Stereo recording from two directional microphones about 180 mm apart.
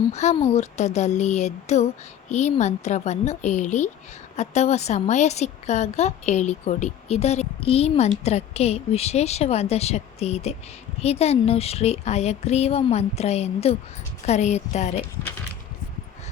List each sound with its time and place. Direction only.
0.1 s a woman's voice: 40° left (ahead or behind)